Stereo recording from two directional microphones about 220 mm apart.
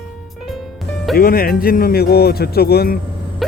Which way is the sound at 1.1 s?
40° left (ahead or behind).